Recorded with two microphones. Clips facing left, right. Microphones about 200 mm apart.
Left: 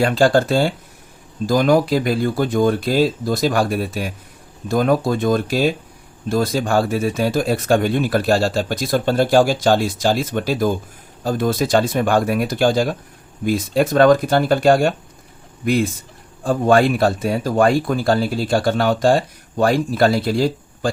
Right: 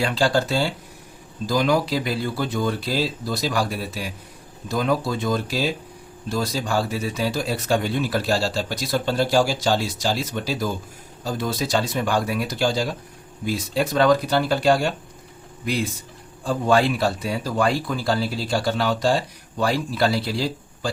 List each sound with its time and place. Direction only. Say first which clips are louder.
0.0 s speech: left 6 dB; 50° left (ahead or behind)